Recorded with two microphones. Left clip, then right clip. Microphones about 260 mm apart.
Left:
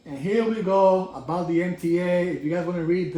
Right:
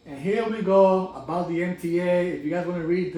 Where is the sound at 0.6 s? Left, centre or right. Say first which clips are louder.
Right 2 dB; left.